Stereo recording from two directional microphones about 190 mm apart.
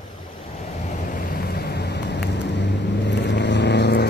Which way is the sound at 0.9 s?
45° left (ahead or behind).